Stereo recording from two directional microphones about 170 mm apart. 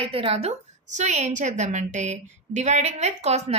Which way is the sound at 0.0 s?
30° right (ahead or behind).